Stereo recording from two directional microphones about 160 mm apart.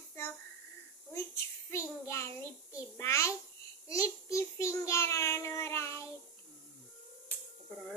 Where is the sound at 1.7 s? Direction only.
20° left (ahead or behind).